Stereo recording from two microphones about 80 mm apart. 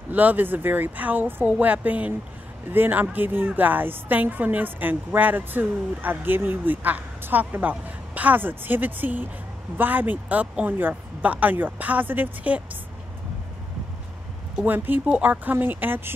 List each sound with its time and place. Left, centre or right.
0.1 s a woman's voice: right
14.6 s a woman's voice: right